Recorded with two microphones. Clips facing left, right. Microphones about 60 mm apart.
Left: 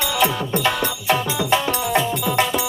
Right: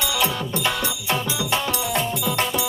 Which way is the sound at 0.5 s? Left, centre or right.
Left.